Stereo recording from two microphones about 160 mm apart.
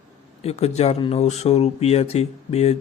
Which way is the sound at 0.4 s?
40° left (ahead or behind).